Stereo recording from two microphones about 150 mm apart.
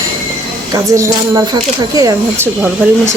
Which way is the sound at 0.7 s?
20° right (ahead or behind).